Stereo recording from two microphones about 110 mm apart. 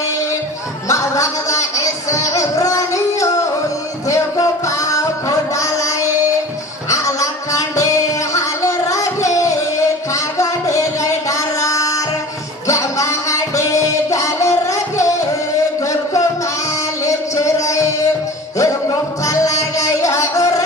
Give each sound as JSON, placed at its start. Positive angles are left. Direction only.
{"t": 0.8, "sound": "a sound", "side_deg": 30}
{"t": 6.9, "sound": "music", "side_deg": 30}
{"t": 17.0, "sound": "music", "side_deg": 30}